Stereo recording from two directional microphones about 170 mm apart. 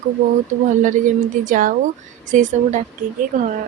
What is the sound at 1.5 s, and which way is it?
A woman's voice, 55° right (ahead or behind).